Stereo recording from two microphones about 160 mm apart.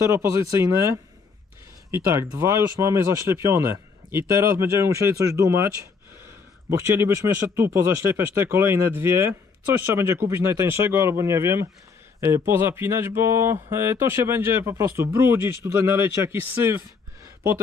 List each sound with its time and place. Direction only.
0.0 s speech: 20° right (ahead or behind)
6.7 s speech: 15° right (ahead or behind)